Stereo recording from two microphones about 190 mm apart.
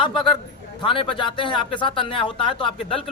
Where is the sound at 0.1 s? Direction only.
Centre (ahead or behind).